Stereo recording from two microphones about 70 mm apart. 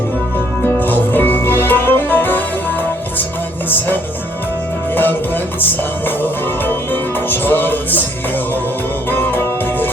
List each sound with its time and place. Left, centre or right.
0.8 s music: left
4.9 s music: left
6.7 s music: left
9.0 s music: left